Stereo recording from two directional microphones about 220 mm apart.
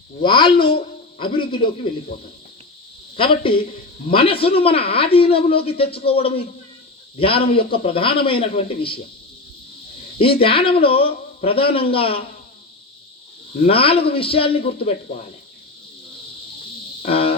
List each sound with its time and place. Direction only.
0.2 s a man's voice: 20° left (ahead or behind)
3.2 s a man's voice: 25° left (ahead or behind)
10.2 s a man's voice: 25° left (ahead or behind)
13.7 s a man's voice: 25° left (ahead or behind)
17.1 s a sound: 25° left (ahead or behind)